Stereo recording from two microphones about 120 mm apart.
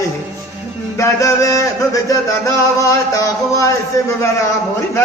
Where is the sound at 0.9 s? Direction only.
25° left (ahead or behind).